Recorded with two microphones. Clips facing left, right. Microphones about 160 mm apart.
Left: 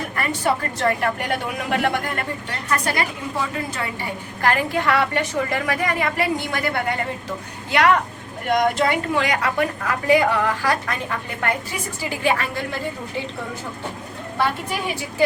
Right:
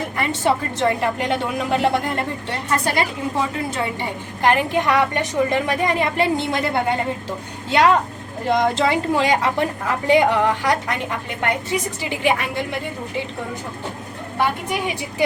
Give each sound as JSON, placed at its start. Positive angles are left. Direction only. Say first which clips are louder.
{"t": 0.2, "sound": "a woman's voice", "louder": "right 2 dB", "side_deg": -20}